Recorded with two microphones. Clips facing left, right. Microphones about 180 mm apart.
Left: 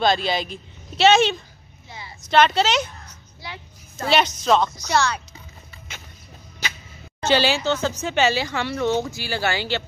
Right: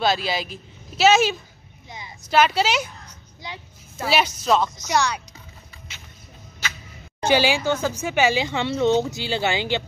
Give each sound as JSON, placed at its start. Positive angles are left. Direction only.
{"t": 0.0, "sound": "speech", "side_deg": -5}
{"t": 1.9, "sound": "a sound", "side_deg": -15}
{"t": 2.3, "sound": "speech", "side_deg": -10}
{"t": 7.2, "sound": "speech", "side_deg": -10}